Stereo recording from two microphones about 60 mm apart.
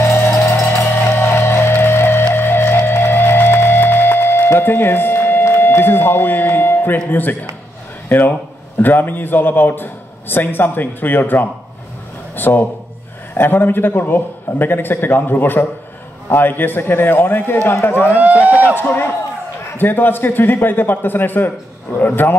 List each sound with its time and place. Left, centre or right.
0.0 s music: left
7.1 s a man's voice: left
8.8 s a man's voice: left
12.4 s a man's voice: left
18.1 s speech: right
19.8 s a man's voice: left